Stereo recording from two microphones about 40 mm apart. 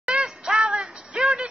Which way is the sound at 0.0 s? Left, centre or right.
Centre.